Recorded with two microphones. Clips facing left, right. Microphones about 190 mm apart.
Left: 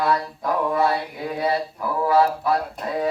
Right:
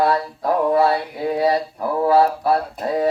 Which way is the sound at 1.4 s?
35° right (ahead or behind).